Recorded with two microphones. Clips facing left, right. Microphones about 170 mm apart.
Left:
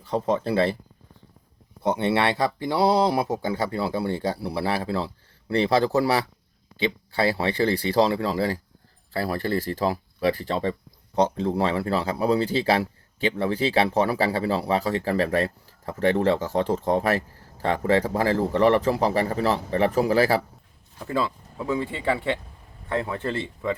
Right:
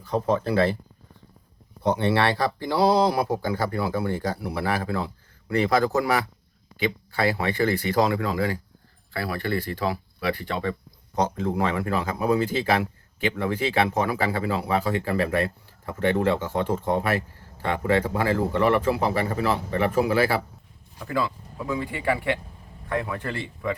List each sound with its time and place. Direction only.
0.0 s speech: 25° left (ahead or behind)
1.8 s speech: 20° left (ahead or behind)
21.0 s speech: 25° left (ahead or behind)